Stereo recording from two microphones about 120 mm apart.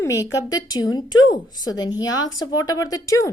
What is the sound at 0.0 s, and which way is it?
A woman's voice, 25° left (ahead or behind).